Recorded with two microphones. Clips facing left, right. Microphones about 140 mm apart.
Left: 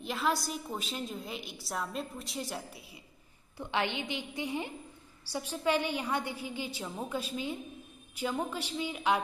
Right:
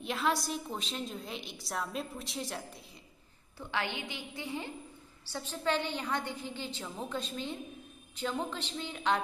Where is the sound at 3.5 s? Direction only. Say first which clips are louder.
Left 3 dB; 20° left (ahead or behind).